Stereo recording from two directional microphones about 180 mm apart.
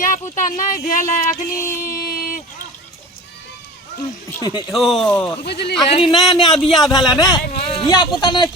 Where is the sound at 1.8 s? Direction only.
55° left (ahead or behind).